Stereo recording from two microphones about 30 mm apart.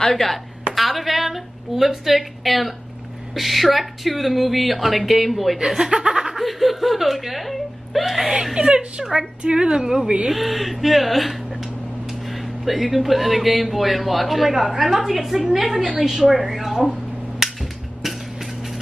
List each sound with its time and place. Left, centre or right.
0.1 s speech: centre
5.9 s speech: right
6.3 s speech: centre
8.5 s a woman's voice: right
9.7 s a woman's voice: centre
10.3 s a woman's voice: centre
17.6 s a sound: centre